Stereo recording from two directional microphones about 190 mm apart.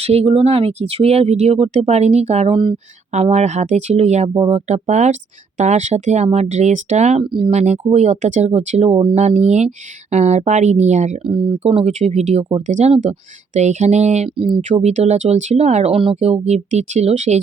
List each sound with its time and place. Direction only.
0.0 s speech: 30° right (ahead or behind)